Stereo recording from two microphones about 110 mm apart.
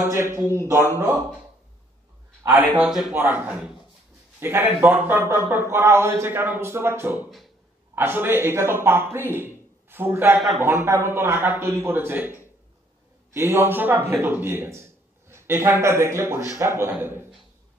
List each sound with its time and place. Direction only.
0.1 s a man's voice: 25° right (ahead or behind)
2.4 s a man's voice: 15° right (ahead or behind)